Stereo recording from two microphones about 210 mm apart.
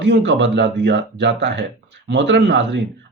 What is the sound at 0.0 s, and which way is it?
Speech, 60° right (ahead or behind).